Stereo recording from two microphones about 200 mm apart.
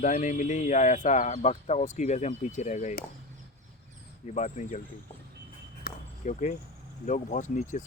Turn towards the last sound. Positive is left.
turn(degrees=40)  # may be behind; listen again after turning